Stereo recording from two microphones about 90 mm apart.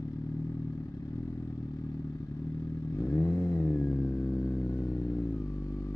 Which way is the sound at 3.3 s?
25° left (ahead or behind).